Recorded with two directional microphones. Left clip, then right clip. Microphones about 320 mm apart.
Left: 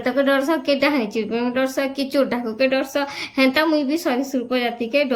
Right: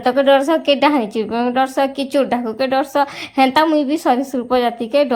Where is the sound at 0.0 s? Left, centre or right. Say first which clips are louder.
Right 6 dB; centre.